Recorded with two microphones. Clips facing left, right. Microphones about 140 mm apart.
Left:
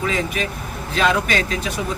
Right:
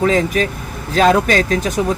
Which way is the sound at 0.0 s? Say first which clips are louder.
Right 8 dB; 40° right (ahead or behind).